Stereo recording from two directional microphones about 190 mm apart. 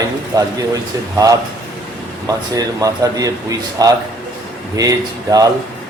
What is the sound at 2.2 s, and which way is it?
Speech, 20° right (ahead or behind).